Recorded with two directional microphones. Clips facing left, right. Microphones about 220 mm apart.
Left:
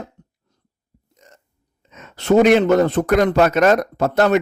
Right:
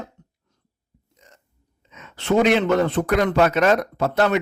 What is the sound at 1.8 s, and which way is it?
Speech, 45° left (ahead or behind).